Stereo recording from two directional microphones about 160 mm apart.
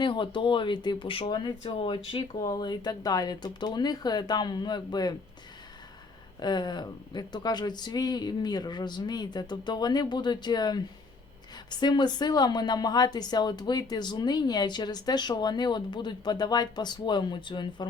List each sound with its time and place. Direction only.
0.0 s speech: 30° left (ahead or behind)
6.4 s speech: 25° left (ahead or behind)